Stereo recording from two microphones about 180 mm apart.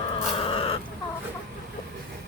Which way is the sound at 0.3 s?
30° left (ahead or behind).